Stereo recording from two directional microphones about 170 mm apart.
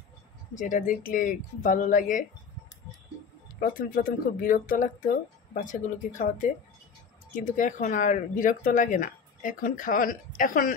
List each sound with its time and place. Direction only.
0.6 s speech: 50° left (ahead or behind)
3.6 s speech: 55° left (ahead or behind)